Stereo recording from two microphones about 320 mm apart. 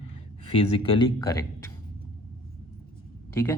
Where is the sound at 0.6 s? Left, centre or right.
Centre.